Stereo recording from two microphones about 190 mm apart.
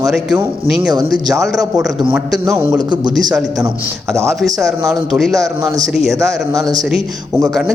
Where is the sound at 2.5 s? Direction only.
15° right (ahead or behind).